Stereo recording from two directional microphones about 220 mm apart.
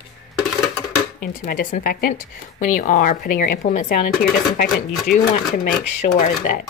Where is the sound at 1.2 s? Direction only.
40° left (ahead or behind).